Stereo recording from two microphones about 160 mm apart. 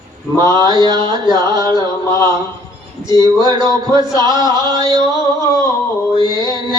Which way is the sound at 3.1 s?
30° right (ahead or behind).